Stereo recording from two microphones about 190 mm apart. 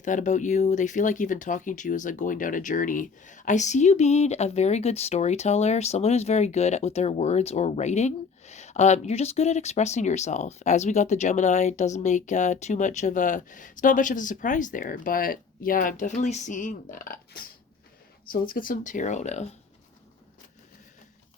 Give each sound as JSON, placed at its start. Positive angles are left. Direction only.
{"t": 0.0, "sound": "speech", "side_deg": 40}